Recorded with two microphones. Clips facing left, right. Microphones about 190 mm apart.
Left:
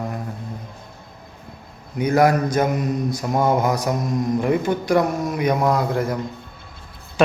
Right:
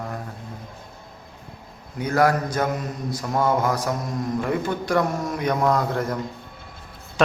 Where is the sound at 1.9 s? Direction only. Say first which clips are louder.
Left 3 dB; 15° left (ahead or behind).